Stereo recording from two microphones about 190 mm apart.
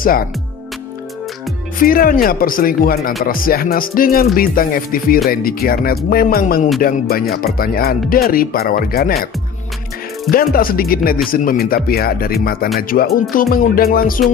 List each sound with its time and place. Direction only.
1.8 s speech: 50° left (ahead or behind)
10.3 s speech: 50° left (ahead or behind)